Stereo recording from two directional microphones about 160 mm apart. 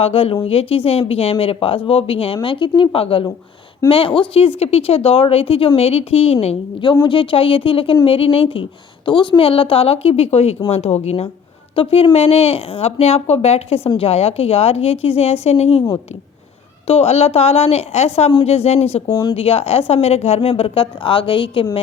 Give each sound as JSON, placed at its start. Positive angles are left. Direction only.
{"t": 0.0, "sound": "a woman's voice", "side_deg": 35}
{"t": 16.8, "sound": "a woman's voice", "side_deg": 40}